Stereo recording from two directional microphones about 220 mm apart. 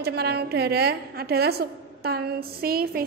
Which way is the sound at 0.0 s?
45° right (ahead or behind).